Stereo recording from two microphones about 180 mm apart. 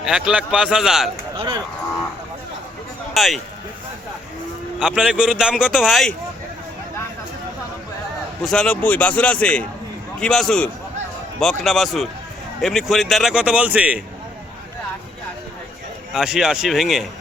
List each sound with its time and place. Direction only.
0.0 s speech: 5° right (ahead or behind)
3.2 s speech: centre (ahead or behind)
4.8 s speech: 5° right (ahead or behind)
8.4 s speech: 5° left (ahead or behind)
16.1 s speech: 5° right (ahead or behind)